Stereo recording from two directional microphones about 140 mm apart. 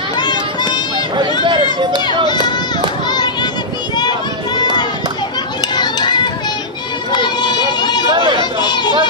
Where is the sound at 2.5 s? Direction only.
30° left (ahead or behind).